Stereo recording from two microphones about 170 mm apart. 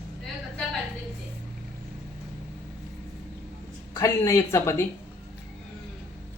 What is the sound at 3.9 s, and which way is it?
Speech, 20° left (ahead or behind).